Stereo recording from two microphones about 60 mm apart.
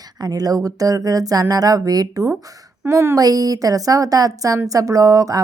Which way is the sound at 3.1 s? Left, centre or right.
Right.